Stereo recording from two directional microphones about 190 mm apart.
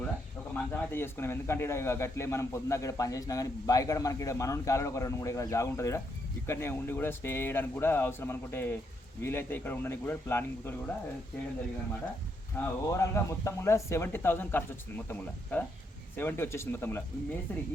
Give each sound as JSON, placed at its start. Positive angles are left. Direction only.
{"t": 0.5, "sound": "a man's voice", "side_deg": 10}
{"t": 12.5, "sound": "a man's voice", "side_deg": 15}